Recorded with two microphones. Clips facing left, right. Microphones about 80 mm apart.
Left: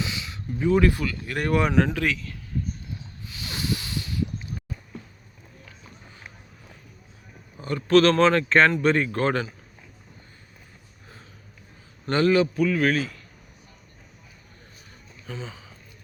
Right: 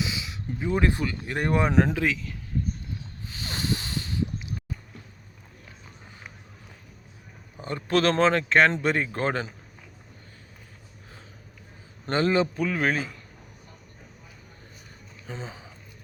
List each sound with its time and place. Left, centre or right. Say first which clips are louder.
0.0 s a sound: even; centre
0.9 s speech: left 2 dB; right
2.0 s speech: even; centre
3.2 s snort: even; right
7.8 s speech: left 5 dB; centre
12.0 s speech: left 3 dB; right
15.3 s speech: left 1 dB; right